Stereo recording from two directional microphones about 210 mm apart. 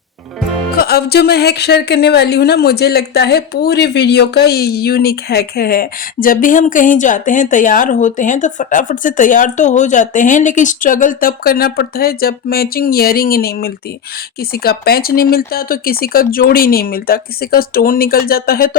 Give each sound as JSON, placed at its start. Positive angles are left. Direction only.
{"t": 0.8, "sound": "speech", "side_deg": 45}